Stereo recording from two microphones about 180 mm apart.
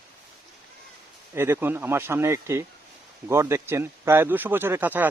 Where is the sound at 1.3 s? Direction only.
10° right (ahead or behind).